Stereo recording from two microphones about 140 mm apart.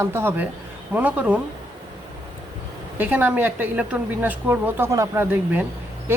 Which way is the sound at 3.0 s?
15° right (ahead or behind).